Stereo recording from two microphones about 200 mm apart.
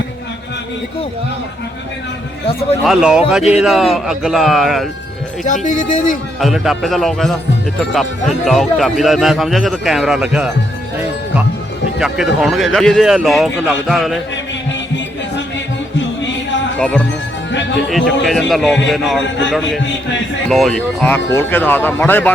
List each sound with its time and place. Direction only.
2.8 s speech: centre (ahead or behind)
5.5 s speech: 40° left (ahead or behind)
6.4 s speech: centre (ahead or behind)
11.9 s speech: 5° right (ahead or behind)
16.0 s music: 65° left (ahead or behind)
17.8 s speech: centre (ahead or behind)